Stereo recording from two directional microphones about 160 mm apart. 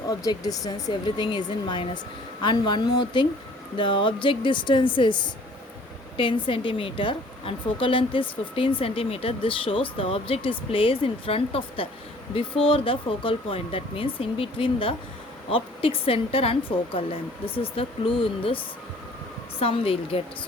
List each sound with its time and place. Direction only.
0.1 s a woman's voice: 25° left (ahead or behind)